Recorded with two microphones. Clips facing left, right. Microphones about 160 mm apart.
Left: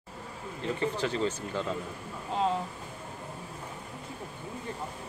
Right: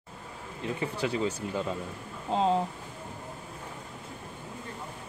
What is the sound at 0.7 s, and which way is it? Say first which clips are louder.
Speech: even; 10° right (ahead or behind).